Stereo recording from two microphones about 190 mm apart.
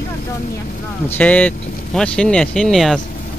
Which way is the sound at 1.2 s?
10° left (ahead or behind).